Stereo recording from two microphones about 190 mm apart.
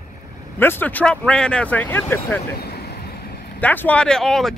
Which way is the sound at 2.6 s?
55° left (ahead or behind).